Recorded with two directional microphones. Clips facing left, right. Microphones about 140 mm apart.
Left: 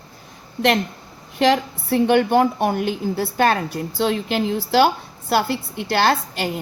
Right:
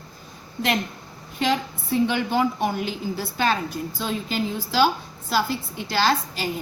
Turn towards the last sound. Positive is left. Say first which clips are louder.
# left 3 dB
turn(degrees=60)  # may be behind; listen again after turning